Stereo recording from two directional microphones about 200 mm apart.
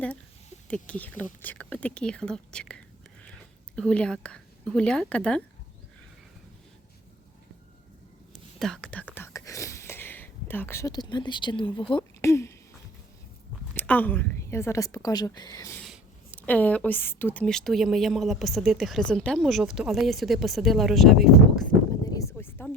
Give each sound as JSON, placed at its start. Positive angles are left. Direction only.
{"t": 0.7, "sound": "a woman's voice", "side_deg": 5}
{"t": 8.3, "sound": "whispering", "side_deg": 0}
{"t": 11.9, "sound": "speech", "side_deg": 15}
{"t": 13.7, "sound": "a woman's voice", "side_deg": 10}
{"t": 22.0, "sound": "a sound", "side_deg": 15}